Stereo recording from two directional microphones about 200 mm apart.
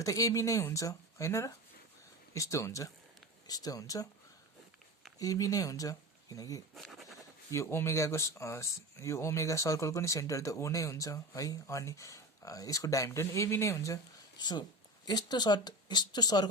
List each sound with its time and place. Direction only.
0.0 s speech: 15° left (ahead or behind)
5.2 s speech: 15° left (ahead or behind)
6.7 s a sound: centre (ahead or behind)
7.5 s speech: 15° left (ahead or behind)